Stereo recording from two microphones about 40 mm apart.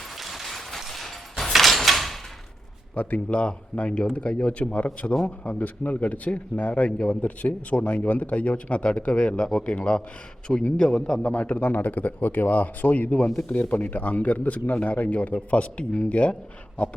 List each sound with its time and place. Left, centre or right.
0.2 s a sound: centre
2.9 s a man's voice: left; by 11.2 s centre
11.2 s a man's voice: left
15.3 s speech: left